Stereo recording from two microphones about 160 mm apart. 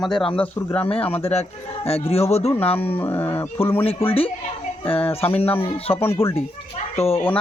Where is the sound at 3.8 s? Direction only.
35° left (ahead or behind).